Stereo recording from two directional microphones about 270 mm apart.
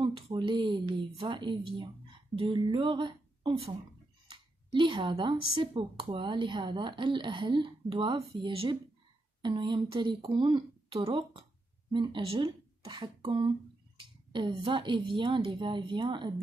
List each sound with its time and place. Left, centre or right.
0.0 s a woman's voice: centre